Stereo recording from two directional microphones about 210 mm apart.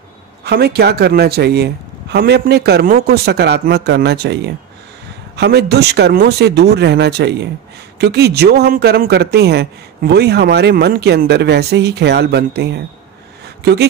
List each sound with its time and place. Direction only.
0.4 s speech: 50° right (ahead or behind)